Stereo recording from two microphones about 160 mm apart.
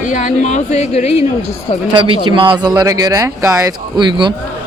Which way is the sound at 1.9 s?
30° right (ahead or behind).